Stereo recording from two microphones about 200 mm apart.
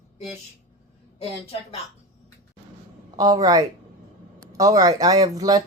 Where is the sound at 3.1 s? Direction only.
20° right (ahead or behind).